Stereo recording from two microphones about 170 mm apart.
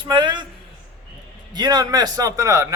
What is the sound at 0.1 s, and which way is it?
Speech, 25° right (ahead or behind).